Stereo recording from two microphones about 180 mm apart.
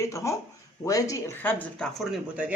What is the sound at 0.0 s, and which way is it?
Speech, 15° left (ahead or behind).